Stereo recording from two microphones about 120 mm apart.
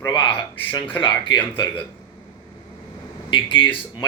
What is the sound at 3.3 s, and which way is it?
Speech, 45° left (ahead or behind).